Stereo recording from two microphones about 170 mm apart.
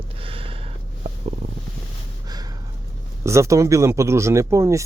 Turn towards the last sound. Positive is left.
turn(degrees=-15)  # may be behind; listen again after turning